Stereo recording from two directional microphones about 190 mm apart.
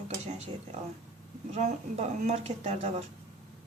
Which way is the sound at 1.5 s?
35° right (ahead or behind).